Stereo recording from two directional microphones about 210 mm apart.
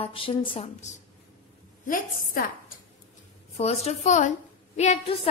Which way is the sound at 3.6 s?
30° left (ahead or behind).